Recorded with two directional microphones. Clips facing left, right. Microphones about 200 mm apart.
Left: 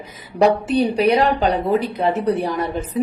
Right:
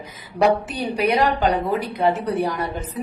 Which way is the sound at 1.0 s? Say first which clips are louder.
Right 1 dB; 30° left (ahead or behind).